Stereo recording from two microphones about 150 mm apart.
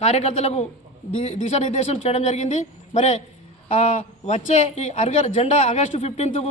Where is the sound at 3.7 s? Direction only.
40° left (ahead or behind).